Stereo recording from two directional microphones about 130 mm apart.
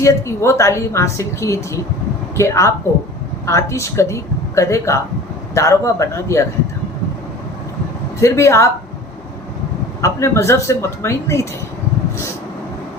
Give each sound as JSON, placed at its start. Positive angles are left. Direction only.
{"t": 0.0, "sound": "a woman's voice", "side_deg": 25}
{"t": 8.2, "sound": "a woman's voice", "side_deg": 20}
{"t": 10.0, "sound": "a woman's voice", "side_deg": 20}